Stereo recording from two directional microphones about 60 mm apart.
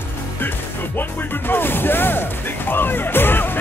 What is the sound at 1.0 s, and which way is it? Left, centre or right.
Speech, left.